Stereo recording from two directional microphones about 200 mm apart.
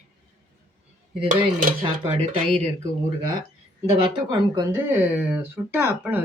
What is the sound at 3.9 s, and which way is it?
Speech, 25° right (ahead or behind).